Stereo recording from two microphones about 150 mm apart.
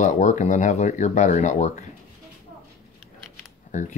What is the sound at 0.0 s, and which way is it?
Speech, 50° left (ahead or behind).